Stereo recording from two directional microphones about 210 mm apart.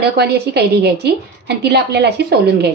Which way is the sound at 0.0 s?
50° right (ahead or behind).